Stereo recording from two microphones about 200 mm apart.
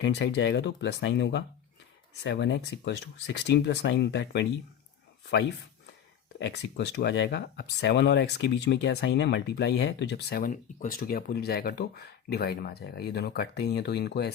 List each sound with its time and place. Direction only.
0.0 s speech: 60° left (ahead or behind)
6.4 s speech: 55° left (ahead or behind)